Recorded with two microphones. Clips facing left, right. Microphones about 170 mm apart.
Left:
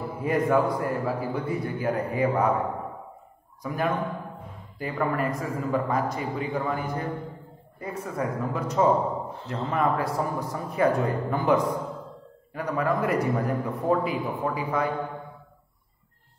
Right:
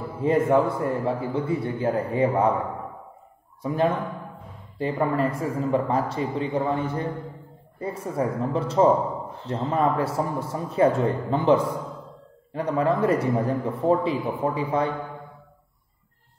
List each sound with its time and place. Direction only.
0.2 s a man's voice: 25° right (ahead or behind)
3.6 s a man's voice: 25° right (ahead or behind)